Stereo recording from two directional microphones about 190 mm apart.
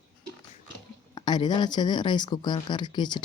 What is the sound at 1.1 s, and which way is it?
Speech, 25° left (ahead or behind).